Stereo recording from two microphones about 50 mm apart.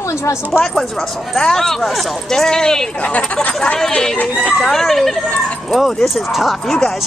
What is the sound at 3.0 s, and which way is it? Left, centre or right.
Speech, left.